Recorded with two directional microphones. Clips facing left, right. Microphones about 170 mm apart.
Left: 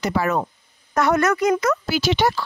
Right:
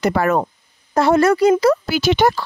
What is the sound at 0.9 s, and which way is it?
Speech, 30° right (ahead or behind).